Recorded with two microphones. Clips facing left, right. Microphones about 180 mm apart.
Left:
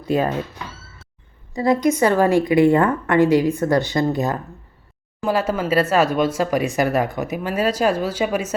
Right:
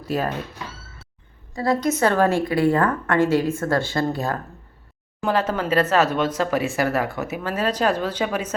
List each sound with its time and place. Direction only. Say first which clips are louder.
1.5 s speech: left 4 dB; 15° left (ahead or behind)